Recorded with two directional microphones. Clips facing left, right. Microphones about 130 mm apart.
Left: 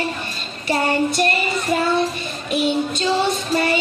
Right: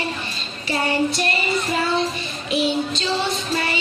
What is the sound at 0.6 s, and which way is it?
Child singing, 50° left (ahead or behind).